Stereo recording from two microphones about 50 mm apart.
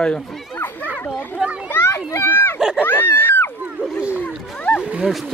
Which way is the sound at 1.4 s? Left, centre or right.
Centre.